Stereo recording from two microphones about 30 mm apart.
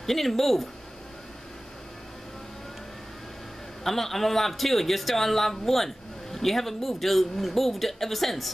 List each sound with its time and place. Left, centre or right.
0.0 s a man's voice: centre
3.8 s a man's voice: centre